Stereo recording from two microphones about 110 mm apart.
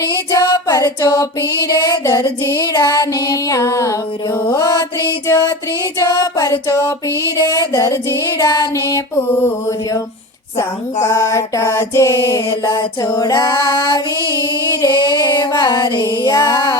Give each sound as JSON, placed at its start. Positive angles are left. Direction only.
{"t": 0.3, "sound": "female singing", "side_deg": 35}
{"t": 11.0, "sound": "music", "side_deg": 25}
{"t": 14.3, "sound": "female singing", "side_deg": 40}